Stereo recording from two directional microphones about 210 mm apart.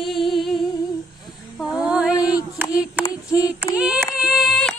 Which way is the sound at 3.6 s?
10° right (ahead or behind).